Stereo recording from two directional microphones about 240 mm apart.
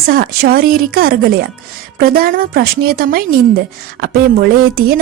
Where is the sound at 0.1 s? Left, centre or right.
Right.